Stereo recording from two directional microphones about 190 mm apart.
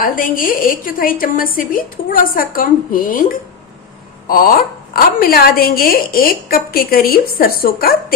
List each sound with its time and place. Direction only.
0.0 s a woman's voice: 45° left (ahead or behind)
4.3 s a woman's voice: 50° left (ahead or behind)